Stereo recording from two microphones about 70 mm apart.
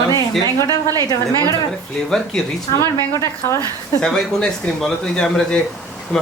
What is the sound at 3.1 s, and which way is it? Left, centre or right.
Speech, left.